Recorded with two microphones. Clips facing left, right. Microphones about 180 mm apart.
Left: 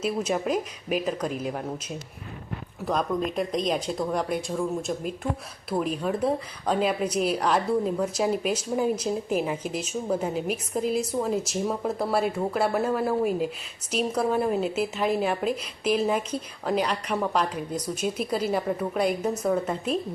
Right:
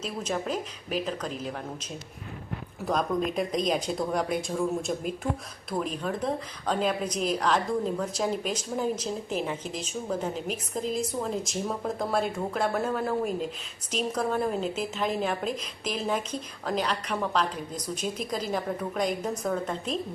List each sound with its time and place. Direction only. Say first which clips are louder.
0.0 s speech: left 5 dB; 10° left (ahead or behind)
2.8 s speech: left 1 dB; centre (ahead or behind)